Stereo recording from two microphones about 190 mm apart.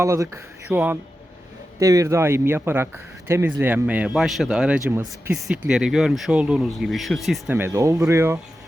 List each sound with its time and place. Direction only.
0.0 s a man's voice: 15° right (ahead or behind); by 7.5 s centre (ahead or behind)
7.5 s speech: 15° right (ahead or behind)